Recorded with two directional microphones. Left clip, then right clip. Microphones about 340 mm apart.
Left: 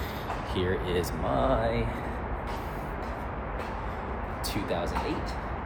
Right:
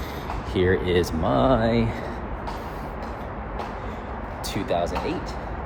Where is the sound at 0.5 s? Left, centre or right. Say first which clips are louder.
Right 9 dB; right.